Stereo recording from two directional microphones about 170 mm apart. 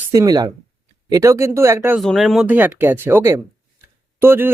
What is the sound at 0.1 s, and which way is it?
Speech, 20° right (ahead or behind).